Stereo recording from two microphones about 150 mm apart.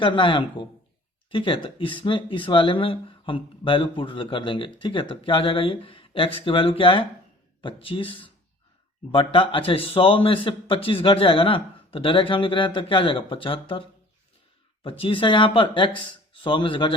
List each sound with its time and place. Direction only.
0.0 s speech: 35° left (ahead or behind)
14.8 s speech: 35° left (ahead or behind)